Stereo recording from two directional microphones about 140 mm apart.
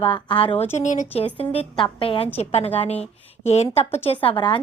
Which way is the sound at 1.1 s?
45° left (ahead or behind).